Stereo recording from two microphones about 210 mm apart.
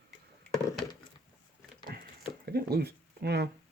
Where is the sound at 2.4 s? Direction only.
50° right (ahead or behind).